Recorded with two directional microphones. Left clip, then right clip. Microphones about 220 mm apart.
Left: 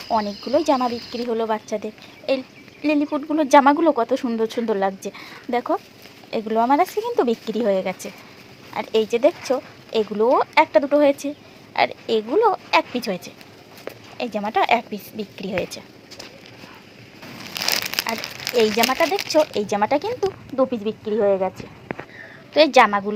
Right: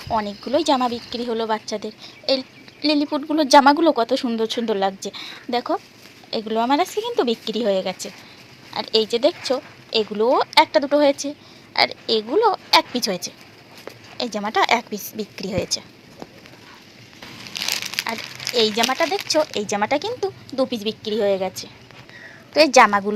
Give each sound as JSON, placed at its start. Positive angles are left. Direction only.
{"t": 0.1, "sound": "a woman's voice", "side_deg": 0}
{"t": 17.5, "sound": "crumpling", "side_deg": 50}
{"t": 18.5, "sound": "speech", "side_deg": 5}
{"t": 20.6, "sound": "a woman's voice", "side_deg": -10}